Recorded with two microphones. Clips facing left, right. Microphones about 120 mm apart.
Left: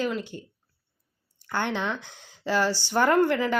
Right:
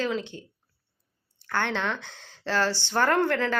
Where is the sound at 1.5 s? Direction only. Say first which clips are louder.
Even; 15° left (ahead or behind).